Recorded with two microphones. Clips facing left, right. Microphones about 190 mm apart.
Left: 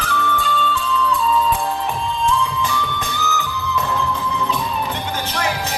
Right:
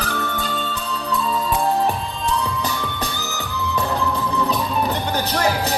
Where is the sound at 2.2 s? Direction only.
40° right (ahead or behind).